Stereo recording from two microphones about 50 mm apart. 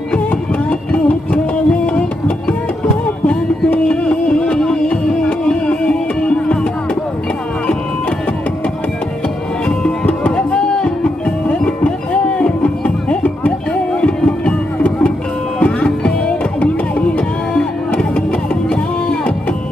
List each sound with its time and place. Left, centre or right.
0.1 s music: left
10.3 s music: centre
17.6 s music: centre